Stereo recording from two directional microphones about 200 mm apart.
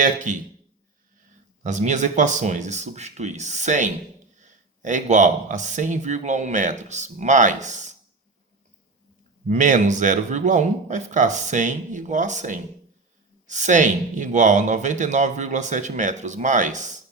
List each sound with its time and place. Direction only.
0.0 s speech: 40° right (ahead or behind)
1.6 s speech: 35° right (ahead or behind)
9.5 s speech: 40° right (ahead or behind)